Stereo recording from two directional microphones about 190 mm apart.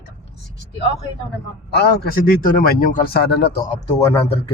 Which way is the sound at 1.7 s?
50° left (ahead or behind).